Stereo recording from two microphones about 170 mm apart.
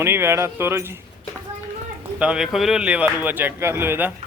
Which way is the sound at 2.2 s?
5° right (ahead or behind).